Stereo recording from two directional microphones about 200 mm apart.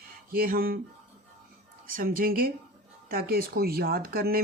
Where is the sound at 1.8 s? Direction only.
45° right (ahead or behind).